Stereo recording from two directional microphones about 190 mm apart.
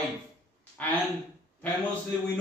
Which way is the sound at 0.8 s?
5° left (ahead or behind).